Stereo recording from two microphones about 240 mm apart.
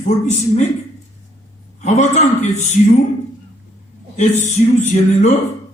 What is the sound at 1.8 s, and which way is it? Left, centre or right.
Speech, left.